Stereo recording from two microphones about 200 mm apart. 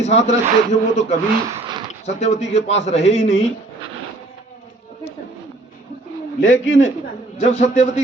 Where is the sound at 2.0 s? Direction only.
35° left (ahead or behind).